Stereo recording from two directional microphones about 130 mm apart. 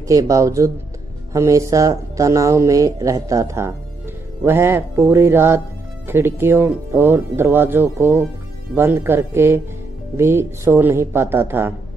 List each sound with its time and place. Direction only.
0.1 s speech: 25° right (ahead or behind)